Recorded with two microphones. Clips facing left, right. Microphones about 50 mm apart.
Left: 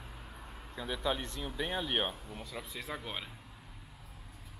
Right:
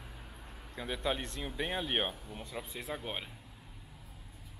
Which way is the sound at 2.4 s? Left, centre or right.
Right.